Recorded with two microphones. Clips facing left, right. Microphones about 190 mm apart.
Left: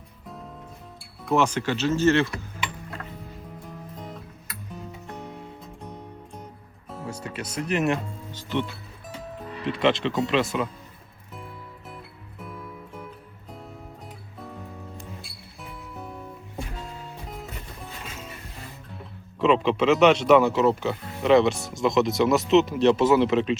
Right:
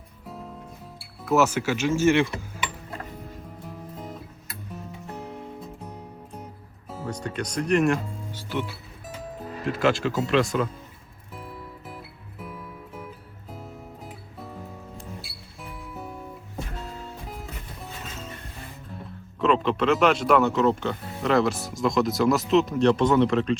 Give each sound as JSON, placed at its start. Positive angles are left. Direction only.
{"t": 0.9, "sound": "speech", "side_deg": -5}
{"t": 3.6, "sound": "music", "side_deg": -5}
{"t": 7.1, "sound": "speech", "side_deg": 5}
{"t": 9.5, "sound": "music", "side_deg": -45}
{"t": 9.7, "sound": "speech", "side_deg": 0}
{"t": 11.3, "sound": "music", "side_deg": -5}
{"t": 15.7, "sound": "music", "side_deg": -5}
{"t": 19.4, "sound": "speech", "side_deg": 5}